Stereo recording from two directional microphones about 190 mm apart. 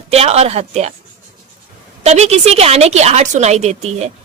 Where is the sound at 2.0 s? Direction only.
35° right (ahead or behind).